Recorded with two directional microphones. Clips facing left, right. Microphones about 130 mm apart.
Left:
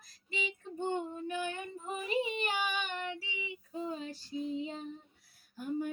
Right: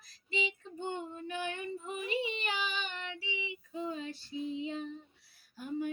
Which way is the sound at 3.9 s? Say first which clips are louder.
Left 1 dB; 40° left (ahead or behind).